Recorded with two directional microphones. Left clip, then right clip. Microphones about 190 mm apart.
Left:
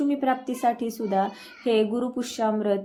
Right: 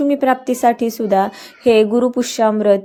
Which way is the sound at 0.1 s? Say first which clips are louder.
Right 10 dB; 40° right (ahead or behind).